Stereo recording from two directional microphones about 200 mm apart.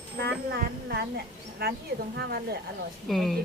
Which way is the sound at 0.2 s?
50° right (ahead or behind).